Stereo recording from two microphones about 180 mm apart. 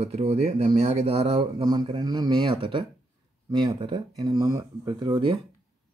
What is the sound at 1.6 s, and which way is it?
Speech, 20° right (ahead or behind).